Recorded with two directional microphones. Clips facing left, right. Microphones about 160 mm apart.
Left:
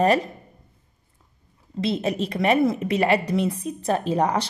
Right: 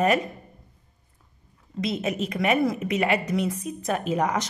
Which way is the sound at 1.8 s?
30° left (ahead or behind).